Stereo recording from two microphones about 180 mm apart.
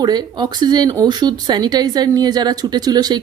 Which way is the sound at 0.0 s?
25° right (ahead or behind).